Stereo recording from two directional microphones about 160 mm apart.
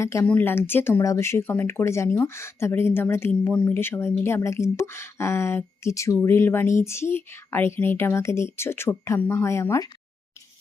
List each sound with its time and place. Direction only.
0.0 s speech: 20° left (ahead or behind)